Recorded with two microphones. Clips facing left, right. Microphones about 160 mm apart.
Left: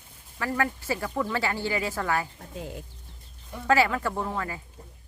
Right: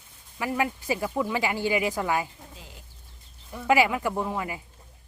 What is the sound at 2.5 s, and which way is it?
Speech, 55° left (ahead or behind).